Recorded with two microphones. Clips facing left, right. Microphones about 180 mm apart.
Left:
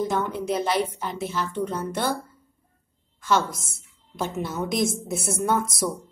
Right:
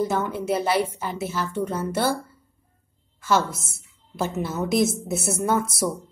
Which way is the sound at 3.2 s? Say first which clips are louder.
Right 1 dB; 5° right (ahead or behind).